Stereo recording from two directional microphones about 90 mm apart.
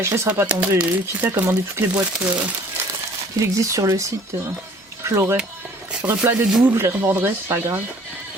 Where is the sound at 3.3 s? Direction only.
35° right (ahead or behind).